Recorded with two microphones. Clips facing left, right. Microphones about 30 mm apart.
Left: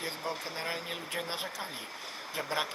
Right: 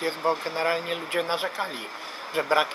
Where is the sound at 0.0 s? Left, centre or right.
Right.